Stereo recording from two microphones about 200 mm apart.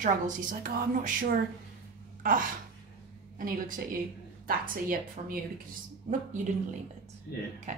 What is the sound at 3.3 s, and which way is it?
A woman's voice, 45° right (ahead or behind).